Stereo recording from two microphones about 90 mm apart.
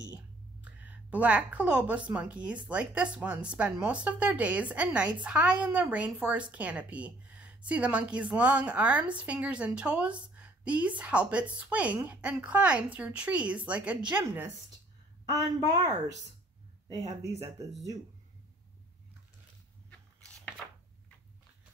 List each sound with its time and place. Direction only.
0.6 s a woman's voice: 15° right (ahead or behind)
16.9 s speech: 40° right (ahead or behind)
19.9 s biting: 10° left (ahead or behind)